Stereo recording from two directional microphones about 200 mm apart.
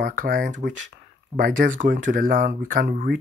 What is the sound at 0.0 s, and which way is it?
Speech, 40° right (ahead or behind).